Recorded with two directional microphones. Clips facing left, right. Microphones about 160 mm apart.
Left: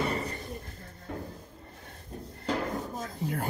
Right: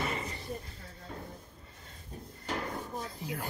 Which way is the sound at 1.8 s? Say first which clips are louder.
Left 4 dB; 60° left (ahead or behind).